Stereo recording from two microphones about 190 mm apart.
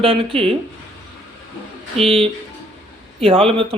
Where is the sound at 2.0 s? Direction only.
30° right (ahead or behind).